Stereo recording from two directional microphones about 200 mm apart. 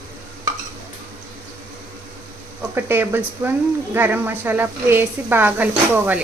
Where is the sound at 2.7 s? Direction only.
10° right (ahead or behind).